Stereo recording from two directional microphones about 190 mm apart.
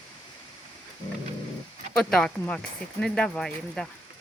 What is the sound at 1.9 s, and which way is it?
Speech, 5° left (ahead or behind).